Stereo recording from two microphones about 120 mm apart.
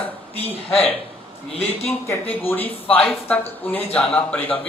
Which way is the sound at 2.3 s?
15° left (ahead or behind).